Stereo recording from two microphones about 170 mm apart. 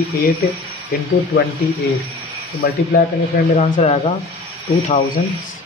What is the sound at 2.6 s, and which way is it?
Speech, 65° left (ahead or behind).